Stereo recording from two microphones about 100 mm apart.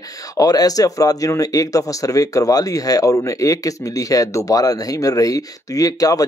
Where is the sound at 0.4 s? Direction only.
40° left (ahead or behind).